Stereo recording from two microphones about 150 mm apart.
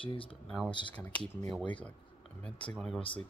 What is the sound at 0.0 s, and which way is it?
Speech, 35° left (ahead or behind).